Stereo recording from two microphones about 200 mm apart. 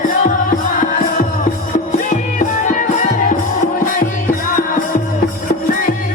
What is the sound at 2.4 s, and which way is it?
Music, 40° left (ahead or behind).